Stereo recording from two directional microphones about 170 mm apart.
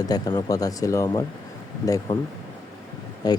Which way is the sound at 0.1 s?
25° left (ahead or behind).